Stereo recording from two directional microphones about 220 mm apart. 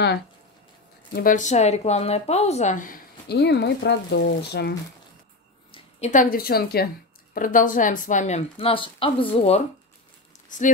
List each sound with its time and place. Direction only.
1.1 s a woman's voice: 35° left (ahead or behind)
5.7 s a woman's voice: 30° left (ahead or behind)